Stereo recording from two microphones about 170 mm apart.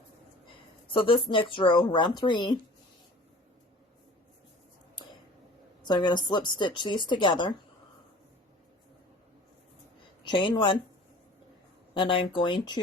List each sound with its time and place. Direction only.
0.9 s a woman's voice: 30° left (ahead or behind)
5.8 s a woman's voice: 25° left (ahead or behind)
10.2 s a woman's voice: 30° left (ahead or behind)
11.9 s a woman's voice: 30° left (ahead or behind)